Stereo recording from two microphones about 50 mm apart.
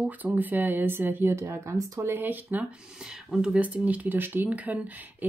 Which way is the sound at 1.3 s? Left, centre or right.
Right.